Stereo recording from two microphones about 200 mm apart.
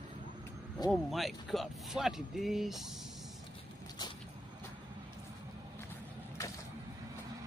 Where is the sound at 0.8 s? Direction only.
20° left (ahead or behind).